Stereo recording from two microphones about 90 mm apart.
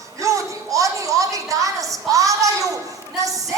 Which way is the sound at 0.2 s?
35° right (ahead or behind).